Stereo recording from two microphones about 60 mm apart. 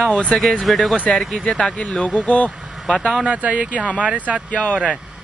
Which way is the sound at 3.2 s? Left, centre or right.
Right.